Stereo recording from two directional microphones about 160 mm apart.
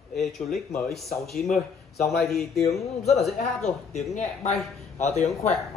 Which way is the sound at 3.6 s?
45° left (ahead or behind).